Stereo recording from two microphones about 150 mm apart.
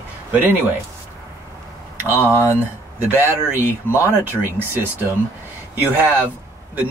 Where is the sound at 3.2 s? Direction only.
15° right (ahead or behind).